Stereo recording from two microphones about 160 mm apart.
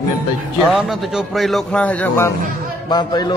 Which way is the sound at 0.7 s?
Centre (ahead or behind).